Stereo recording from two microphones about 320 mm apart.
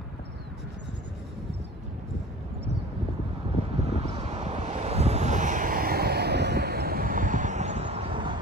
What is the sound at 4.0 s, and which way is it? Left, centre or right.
Vehicle, centre.